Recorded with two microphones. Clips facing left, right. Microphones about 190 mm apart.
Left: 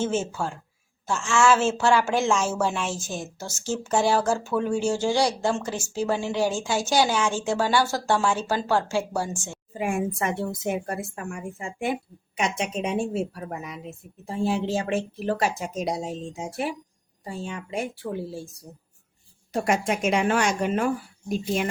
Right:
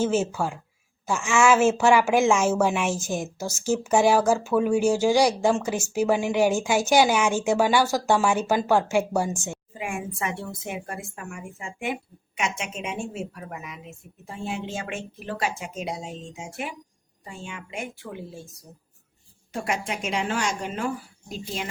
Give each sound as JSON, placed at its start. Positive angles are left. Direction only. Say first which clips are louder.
{"t": 0.0, "sound": "a woman's voice", "louder": "right 3 dB", "side_deg": -5}
{"t": 9.7, "sound": "a woman's voice", "louder": "left 7 dB", "side_deg": 40}
{"t": 19.6, "sound": "a woman's voice", "louder": "left 5 dB", "side_deg": 50}